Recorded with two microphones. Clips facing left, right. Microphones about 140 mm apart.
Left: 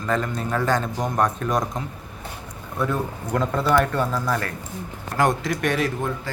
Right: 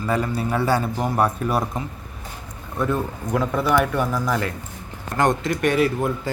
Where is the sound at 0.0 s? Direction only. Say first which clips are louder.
Right 2 dB; 10° right (ahead or behind).